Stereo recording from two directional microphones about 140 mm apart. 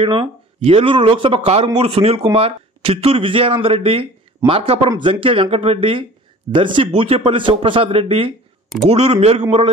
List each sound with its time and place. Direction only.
0.0 s a man's voice: 40° right (ahead or behind)